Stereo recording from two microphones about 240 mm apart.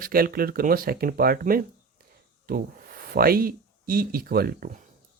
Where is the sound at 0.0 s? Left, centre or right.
Right.